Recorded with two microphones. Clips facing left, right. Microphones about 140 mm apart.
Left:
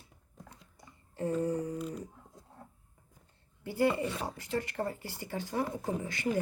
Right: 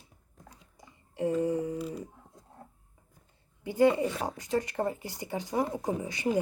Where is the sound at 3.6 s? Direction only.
15° right (ahead or behind).